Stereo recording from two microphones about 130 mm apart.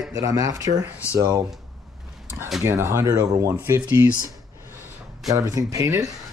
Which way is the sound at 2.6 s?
20° right (ahead or behind).